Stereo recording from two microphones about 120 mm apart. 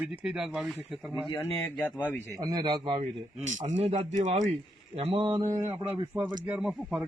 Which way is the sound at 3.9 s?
85° right.